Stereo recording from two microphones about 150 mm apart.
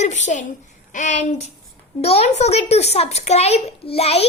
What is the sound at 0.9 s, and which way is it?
A child's voice, 55° left (ahead or behind).